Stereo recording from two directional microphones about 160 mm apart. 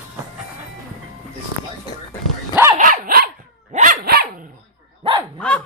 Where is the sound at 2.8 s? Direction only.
60° right (ahead or behind).